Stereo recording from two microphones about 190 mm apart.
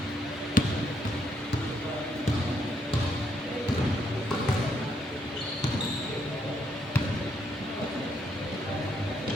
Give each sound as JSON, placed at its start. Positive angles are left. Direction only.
{"t": 0.6, "sound": "basketball bounce", "side_deg": 45}